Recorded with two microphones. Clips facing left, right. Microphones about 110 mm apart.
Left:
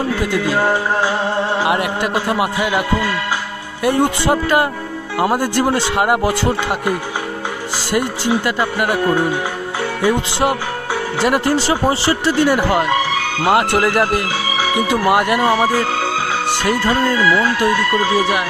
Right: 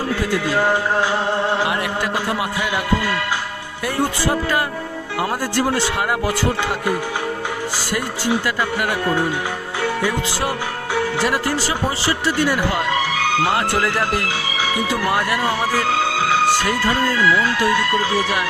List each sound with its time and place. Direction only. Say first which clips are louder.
1.6 s speech: left 4 dB; 20° left (ahead or behind)
3.8 s speech: left 5 dB; 20° left (ahead or behind)
11.2 s speech: left 4 dB; 25° left (ahead or behind)